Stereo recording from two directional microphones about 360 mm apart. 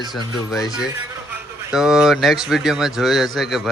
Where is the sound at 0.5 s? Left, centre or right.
Centre.